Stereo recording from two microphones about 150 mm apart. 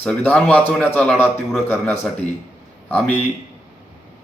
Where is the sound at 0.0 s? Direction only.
10° left (ahead or behind).